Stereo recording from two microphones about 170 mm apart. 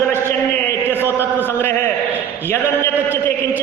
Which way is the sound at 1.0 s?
15° left (ahead or behind).